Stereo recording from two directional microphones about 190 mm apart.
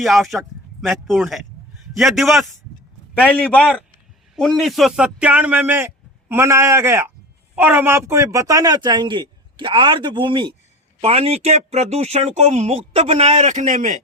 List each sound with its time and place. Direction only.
0.0 s a man's voice: centre (ahead or behind); by 14.0 s 40° right (ahead or behind)